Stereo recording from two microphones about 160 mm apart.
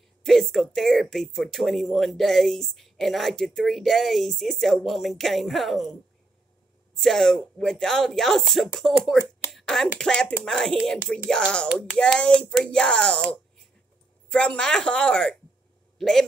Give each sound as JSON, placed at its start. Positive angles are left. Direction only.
{"t": 0.2, "sound": "speech", "side_deg": 0}
{"t": 7.0, "sound": "speech", "side_deg": 0}
{"t": 9.5, "sound": "a sound", "side_deg": 5}
{"t": 9.9, "sound": "speech", "side_deg": 5}